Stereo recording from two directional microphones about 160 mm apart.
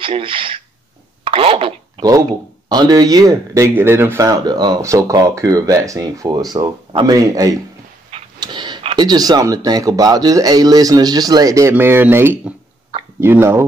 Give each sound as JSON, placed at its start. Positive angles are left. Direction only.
{"t": 0.0, "sound": "speech", "side_deg": -35}
{"t": 1.2, "sound": "a sound", "side_deg": -35}
{"t": 2.7, "sound": "speech", "side_deg": -25}